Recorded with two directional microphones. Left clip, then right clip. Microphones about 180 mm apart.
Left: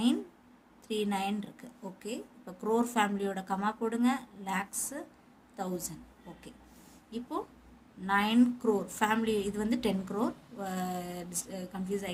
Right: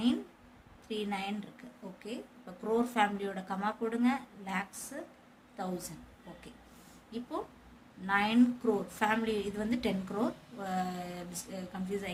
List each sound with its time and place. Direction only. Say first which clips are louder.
0.9 s a woman's voice: left 4 dB; 30° left (ahead or behind)
7.1 s a woman's voice: left 2 dB; 30° left (ahead or behind)